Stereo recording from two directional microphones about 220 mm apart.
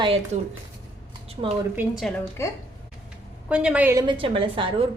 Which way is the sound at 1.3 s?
25° right (ahead or behind).